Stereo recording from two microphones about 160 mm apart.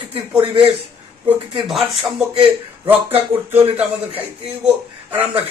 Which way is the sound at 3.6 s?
35° right (ahead or behind).